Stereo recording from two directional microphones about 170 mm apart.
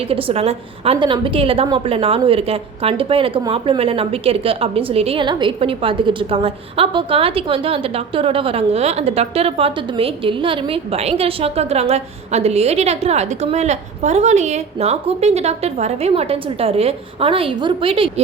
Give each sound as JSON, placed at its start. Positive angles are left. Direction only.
{"t": 0.1, "sound": "a woman's voice", "side_deg": -35}